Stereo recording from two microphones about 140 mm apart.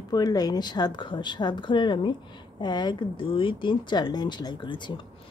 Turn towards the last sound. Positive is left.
turn(degrees=35)  # may be behind; listen again after turning